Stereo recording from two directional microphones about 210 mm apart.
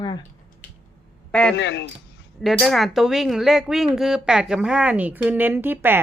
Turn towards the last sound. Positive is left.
turn(degrees=-10)  # may be behind; listen again after turning